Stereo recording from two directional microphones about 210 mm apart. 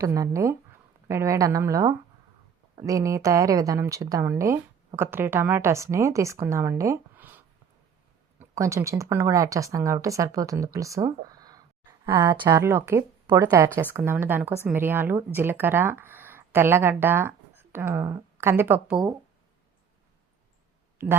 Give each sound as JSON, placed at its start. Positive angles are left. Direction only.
{"t": 0.0, "sound": "a woman's voice", "side_deg": -15}
{"t": 21.0, "sound": "speech", "side_deg": -10}